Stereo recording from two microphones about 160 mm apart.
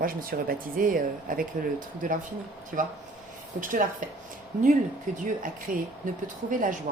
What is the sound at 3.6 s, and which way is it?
Speech, 55° right (ahead or behind).